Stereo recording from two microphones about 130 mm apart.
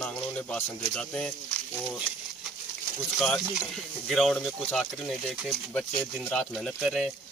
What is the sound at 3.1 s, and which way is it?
Speech, 5° left (ahead or behind).